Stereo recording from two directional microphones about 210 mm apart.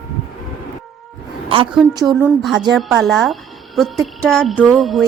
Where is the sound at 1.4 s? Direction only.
25° right (ahead or behind).